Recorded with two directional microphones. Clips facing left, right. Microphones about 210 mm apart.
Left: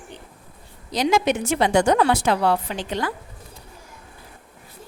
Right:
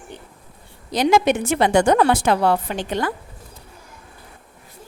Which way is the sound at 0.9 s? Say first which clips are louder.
Right 3 dB; 55° right (ahead or behind).